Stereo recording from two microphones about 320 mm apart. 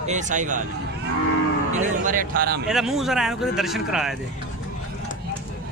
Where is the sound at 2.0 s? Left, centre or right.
Right.